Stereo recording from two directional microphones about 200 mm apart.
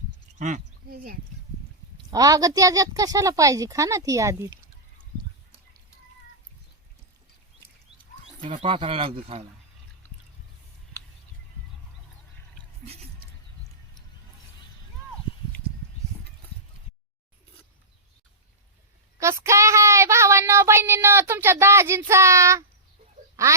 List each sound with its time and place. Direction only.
0.3 s speech: 40° right (ahead or behind)
2.0 s a woman's voice: 20° right (ahead or behind)
8.4 s speech: 30° right (ahead or behind)
19.2 s child singing: 15° right (ahead or behind)
23.4 s a woman's voice: 15° right (ahead or behind)